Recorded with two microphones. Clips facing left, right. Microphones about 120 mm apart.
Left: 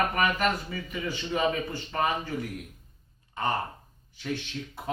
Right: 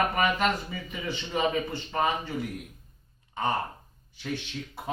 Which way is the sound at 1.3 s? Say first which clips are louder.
Right 1 dB; 20° right (ahead or behind).